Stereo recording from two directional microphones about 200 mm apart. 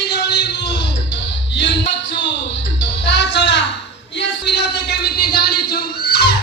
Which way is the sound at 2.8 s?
60° left (ahead or behind).